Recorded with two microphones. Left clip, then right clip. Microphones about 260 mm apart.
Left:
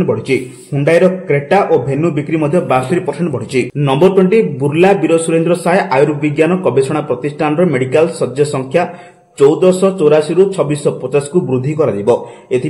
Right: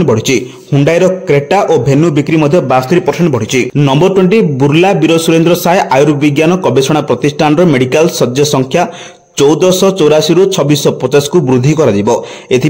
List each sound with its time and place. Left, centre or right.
0.0 s a man's voice: right